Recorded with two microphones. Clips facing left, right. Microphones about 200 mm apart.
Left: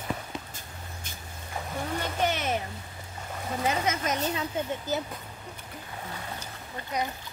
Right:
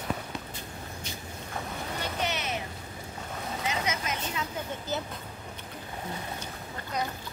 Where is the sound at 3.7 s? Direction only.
45° left (ahead or behind).